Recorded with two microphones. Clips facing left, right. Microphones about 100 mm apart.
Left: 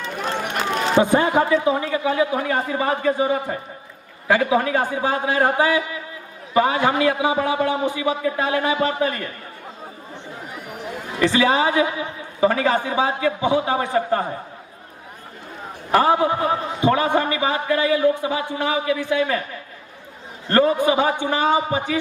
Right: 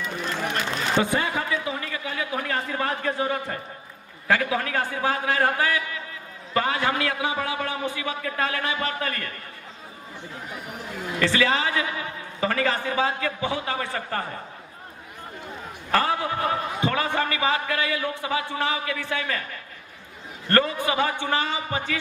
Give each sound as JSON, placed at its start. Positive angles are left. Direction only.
{"t": 0.2, "sound": "run", "side_deg": 60}
{"t": 0.9, "sound": "a man's voice", "side_deg": 45}
{"t": 1.5, "sound": "a man's voice", "side_deg": 30}
{"t": 11.1, "sound": "a man's voice", "side_deg": 20}
{"t": 15.9, "sound": "a man's voice", "side_deg": 15}
{"t": 20.7, "sound": "a man's voice", "side_deg": 15}